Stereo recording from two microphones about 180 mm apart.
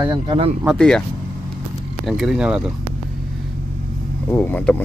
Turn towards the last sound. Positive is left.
turn(degrees=10)  # may be behind; listen again after turning